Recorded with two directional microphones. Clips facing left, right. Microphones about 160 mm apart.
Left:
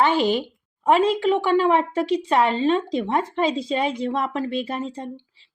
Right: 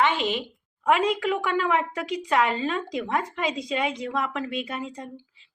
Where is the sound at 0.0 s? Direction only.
35° left (ahead or behind).